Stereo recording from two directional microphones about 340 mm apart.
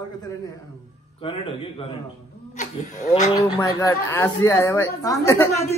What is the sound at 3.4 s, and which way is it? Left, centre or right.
Speech, centre.